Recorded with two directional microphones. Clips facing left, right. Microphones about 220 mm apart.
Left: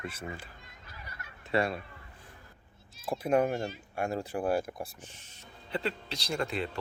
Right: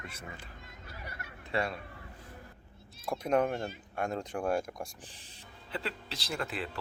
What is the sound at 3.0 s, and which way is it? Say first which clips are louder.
Speech: left 2 dB; 5° left (ahead or behind).